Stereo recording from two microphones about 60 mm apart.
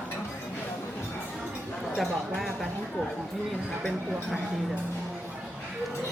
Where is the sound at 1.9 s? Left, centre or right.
Centre.